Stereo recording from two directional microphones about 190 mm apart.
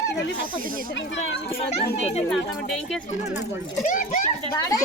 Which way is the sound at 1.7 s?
35° left (ahead or behind).